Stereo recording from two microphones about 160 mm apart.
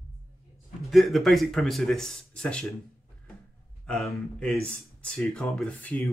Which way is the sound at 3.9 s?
Centre (ahead or behind).